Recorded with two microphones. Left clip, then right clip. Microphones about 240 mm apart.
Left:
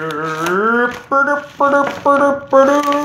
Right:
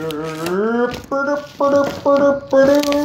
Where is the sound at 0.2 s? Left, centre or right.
Left.